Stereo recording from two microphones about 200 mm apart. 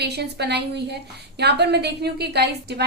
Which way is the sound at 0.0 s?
55° right (ahead or behind).